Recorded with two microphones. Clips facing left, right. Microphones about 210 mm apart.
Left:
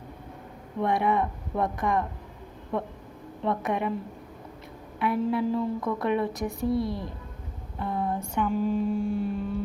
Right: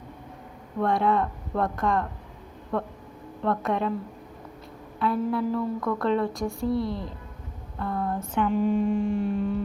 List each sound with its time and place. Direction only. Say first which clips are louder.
0.8 s a woman's voice: right 1 dB; 15° left (ahead or behind)
3.4 s a woman's voice: right 2 dB; 15° left (ahead or behind)
7.8 s mantra: even; 15° left (ahead or behind); by 9.6 s centre (ahead or behind)